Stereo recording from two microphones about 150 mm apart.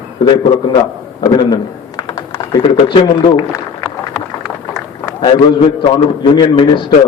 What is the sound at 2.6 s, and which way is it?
Speech, 30° left (ahead or behind).